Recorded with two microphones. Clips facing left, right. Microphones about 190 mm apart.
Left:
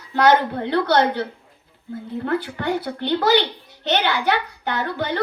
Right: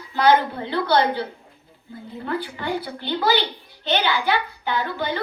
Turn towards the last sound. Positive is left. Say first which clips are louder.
# left 1 dB
turn(degrees=65)  # may be behind; listen again after turning